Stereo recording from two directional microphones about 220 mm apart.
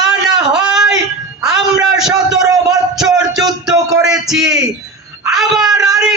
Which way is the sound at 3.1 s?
15° right (ahead or behind).